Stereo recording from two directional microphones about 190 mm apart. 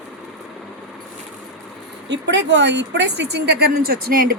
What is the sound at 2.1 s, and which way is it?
A woman's voice, 70° right (ahead or behind).